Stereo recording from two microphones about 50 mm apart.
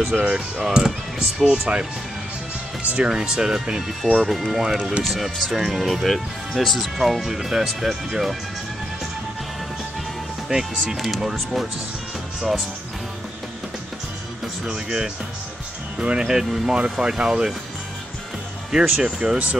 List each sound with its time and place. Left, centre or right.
0.1 s speech: right
0.7 s speech: centre
3.0 s speech: centre
10.5 s speech: centre
14.6 s speech: centre
16.4 s speech: centre
17.0 s speech: centre
18.7 s speech: centre